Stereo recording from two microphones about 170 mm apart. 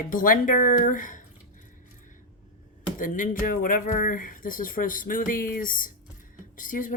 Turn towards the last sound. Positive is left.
turn(degrees=50)  # may be behind; listen again after turning